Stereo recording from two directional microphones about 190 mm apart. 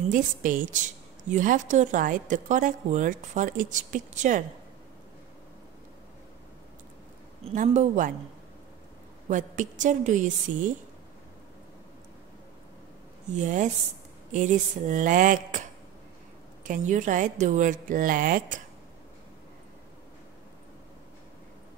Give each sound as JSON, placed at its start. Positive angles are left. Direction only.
{"t": 0.1, "sound": "speech", "side_deg": -45}
{"t": 7.4, "sound": "speech", "side_deg": -35}
{"t": 9.3, "sound": "speech", "side_deg": -40}
{"t": 13.4, "sound": "speech", "side_deg": -40}
{"t": 16.6, "sound": "speech", "side_deg": -40}